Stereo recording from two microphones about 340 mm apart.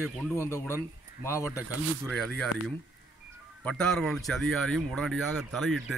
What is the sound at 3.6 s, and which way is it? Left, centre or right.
Speech, centre.